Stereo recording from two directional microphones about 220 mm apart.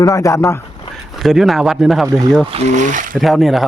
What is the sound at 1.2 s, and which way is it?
Speech, centre (ahead or behind).